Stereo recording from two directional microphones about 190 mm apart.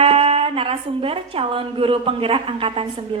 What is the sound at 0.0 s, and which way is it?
A woman's voice, 30° right (ahead or behind).